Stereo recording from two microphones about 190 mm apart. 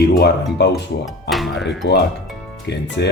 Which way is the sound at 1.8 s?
70° left (ahead or behind).